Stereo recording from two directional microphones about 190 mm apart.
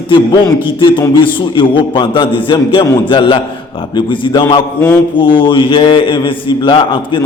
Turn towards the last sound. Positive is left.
turn(degrees=25)  # may be behind; listen again after turning